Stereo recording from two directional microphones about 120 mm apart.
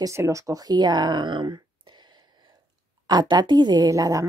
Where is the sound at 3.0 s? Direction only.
35° right (ahead or behind).